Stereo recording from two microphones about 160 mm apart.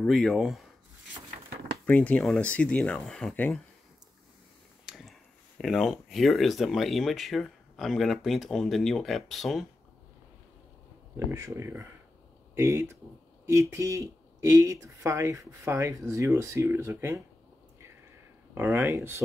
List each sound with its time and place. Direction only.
0.0 s speech: centre (ahead or behind)
1.9 s speech: 10° left (ahead or behind)
4.8 s a sound: centre (ahead or behind)
5.6 s speech: centre (ahead or behind)
11.1 s speech: 15° right (ahead or behind)
18.5 s speech: 15° right (ahead or behind)